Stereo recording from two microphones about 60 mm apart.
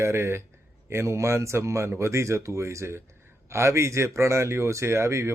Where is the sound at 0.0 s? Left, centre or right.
Right.